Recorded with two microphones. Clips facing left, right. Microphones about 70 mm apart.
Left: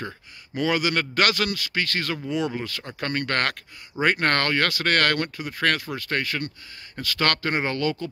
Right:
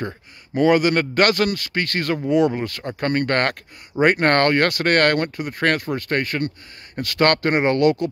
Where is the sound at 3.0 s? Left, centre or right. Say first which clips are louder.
Right 5 dB; right.